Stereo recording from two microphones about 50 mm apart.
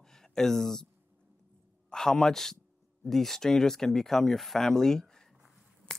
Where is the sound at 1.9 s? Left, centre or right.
Centre.